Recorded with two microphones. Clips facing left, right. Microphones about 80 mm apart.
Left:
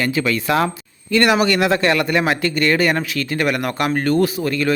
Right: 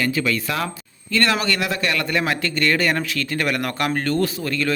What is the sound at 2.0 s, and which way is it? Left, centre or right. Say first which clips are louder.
Speech: left 4 dB; centre.